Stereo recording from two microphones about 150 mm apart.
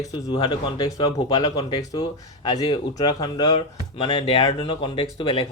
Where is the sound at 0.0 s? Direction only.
25° left (ahead or behind).